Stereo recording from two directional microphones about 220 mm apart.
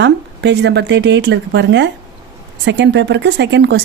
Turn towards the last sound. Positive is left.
turn(degrees=-55)  # may be behind; listen again after turning